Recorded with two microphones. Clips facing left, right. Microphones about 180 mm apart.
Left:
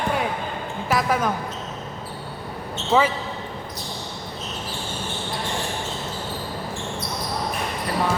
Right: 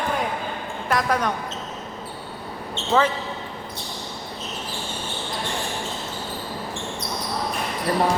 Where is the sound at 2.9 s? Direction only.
10° left (ahead or behind).